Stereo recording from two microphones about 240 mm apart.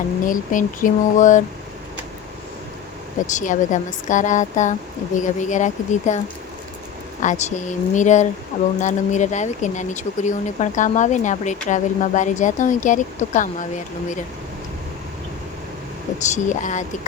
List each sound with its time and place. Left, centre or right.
0.3 s speech: left
3.3 s speech: left
7.2 s speech: left
16.3 s speech: left